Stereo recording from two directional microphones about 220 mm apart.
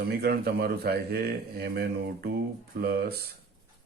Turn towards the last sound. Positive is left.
turn(degrees=-45)  # may be behind; listen again after turning